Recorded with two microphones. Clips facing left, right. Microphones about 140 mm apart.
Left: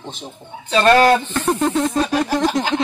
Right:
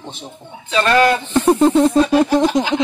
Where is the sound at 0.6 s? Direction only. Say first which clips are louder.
Left 1 dB; 35° left (ahead or behind).